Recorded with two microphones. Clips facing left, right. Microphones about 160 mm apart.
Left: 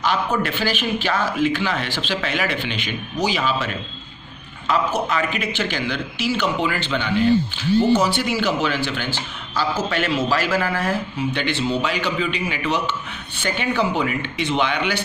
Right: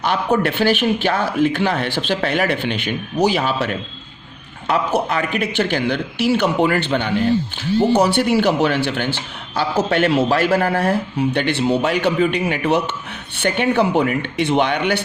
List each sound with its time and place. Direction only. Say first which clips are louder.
0.0 s a man's voice: right 4 dB; 60° right (ahead or behind)